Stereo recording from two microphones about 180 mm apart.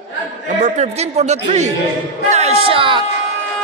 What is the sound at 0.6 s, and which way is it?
Speech, 40° right (ahead or behind).